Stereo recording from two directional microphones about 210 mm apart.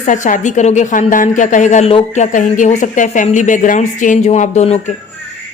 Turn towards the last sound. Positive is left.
turn(degrees=30)  # may be behind; listen again after turning